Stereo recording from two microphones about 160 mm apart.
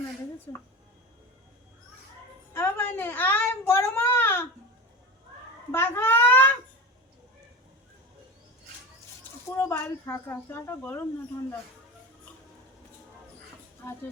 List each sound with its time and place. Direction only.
0.5 s a woman's voice: 20° left (ahead or behind)
2.5 s a child's voice: 15° left (ahead or behind)
5.7 s a child's voice: 15° left (ahead or behind)
9.6 s speech: 15° left (ahead or behind)
13.8 s speech: 10° left (ahead or behind)